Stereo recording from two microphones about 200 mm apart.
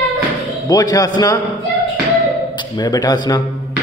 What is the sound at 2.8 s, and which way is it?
Speech, 20° left (ahead or behind).